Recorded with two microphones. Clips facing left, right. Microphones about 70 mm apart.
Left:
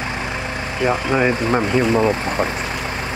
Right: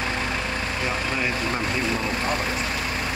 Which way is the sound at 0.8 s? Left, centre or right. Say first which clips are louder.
Left 11 dB; left.